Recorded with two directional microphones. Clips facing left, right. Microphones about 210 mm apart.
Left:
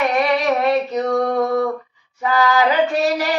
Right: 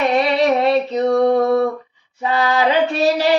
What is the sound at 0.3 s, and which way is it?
Female singing, 30° right (ahead or behind).